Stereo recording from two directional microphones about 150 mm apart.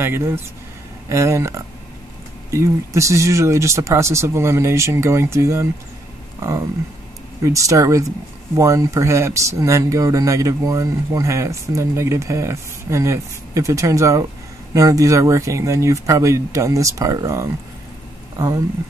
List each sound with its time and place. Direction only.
0.0 s speech: 15° right (ahead or behind)
7.4 s speech: 20° right (ahead or behind)